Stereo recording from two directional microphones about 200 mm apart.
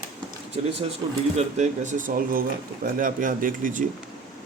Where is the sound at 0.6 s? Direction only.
35° right (ahead or behind).